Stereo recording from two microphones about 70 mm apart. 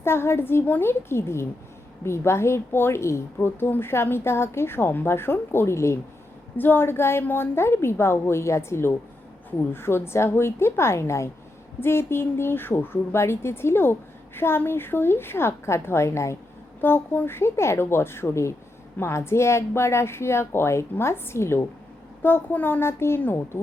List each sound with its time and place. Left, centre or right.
0.0 s a woman's voice: left
6.6 s a woman's voice: left
16.8 s a woman's voice: left
22.2 s a woman's voice: left